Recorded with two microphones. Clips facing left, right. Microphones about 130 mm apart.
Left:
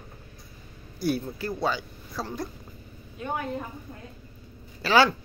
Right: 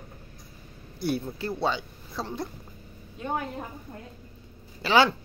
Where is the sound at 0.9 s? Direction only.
25° right (ahead or behind).